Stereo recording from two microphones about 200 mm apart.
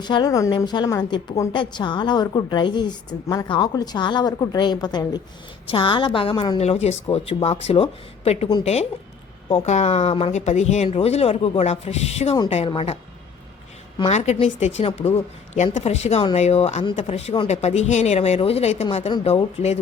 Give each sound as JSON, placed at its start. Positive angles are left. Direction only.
{"t": 0.0, "sound": "a woman's voice", "side_deg": 20}
{"t": 14.0, "sound": "speech", "side_deg": 35}